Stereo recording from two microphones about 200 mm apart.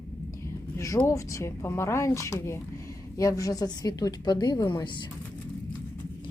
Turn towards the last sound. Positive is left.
turn(degrees=20)  # may be behind; listen again after turning